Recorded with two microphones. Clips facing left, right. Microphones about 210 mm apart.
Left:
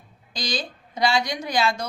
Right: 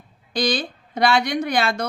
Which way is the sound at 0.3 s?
60° right (ahead or behind).